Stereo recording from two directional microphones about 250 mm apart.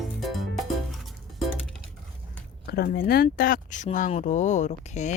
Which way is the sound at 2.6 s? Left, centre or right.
Left.